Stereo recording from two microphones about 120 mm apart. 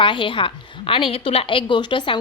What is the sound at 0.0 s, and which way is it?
A woman's voice, 45° left (ahead or behind).